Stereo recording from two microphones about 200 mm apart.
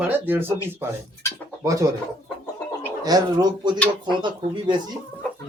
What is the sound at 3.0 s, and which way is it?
Speech, 20° right (ahead or behind).